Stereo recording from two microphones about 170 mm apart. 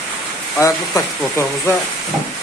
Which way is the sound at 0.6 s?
15° left (ahead or behind).